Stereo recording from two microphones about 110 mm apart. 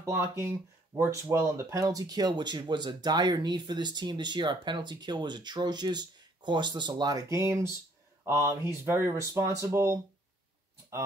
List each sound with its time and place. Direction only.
0.0 s speech: 25° right (ahead or behind)